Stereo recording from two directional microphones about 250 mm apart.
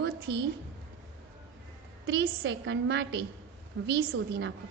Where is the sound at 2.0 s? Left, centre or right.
Right.